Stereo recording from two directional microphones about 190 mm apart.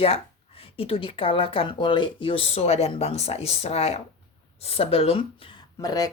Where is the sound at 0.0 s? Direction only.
30° left (ahead or behind).